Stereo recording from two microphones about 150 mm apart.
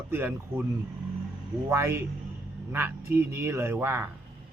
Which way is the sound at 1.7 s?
15° right (ahead or behind).